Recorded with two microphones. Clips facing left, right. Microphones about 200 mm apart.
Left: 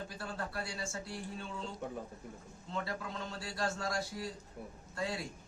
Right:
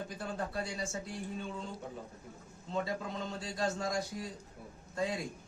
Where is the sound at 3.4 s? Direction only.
20° right (ahead or behind).